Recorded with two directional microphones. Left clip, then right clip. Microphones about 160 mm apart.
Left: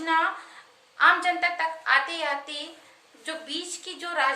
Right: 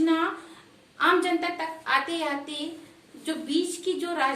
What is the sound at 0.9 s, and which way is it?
A woman's voice, 20° left (ahead or behind).